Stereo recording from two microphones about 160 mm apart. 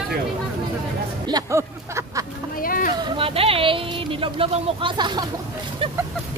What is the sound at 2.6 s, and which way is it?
Speech, 60° left (ahead or behind).